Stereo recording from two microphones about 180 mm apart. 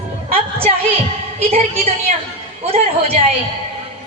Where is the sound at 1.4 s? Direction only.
35° right (ahead or behind).